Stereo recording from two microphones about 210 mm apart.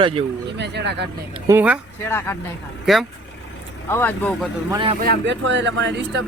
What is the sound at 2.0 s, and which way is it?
Speech, 10° left (ahead or behind).